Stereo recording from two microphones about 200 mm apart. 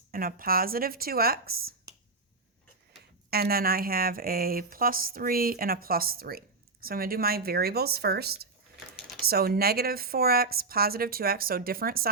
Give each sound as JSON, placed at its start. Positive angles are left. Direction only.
{"t": 0.1, "sound": "speech", "side_deg": -45}
{"t": 3.2, "sound": "speech", "side_deg": -50}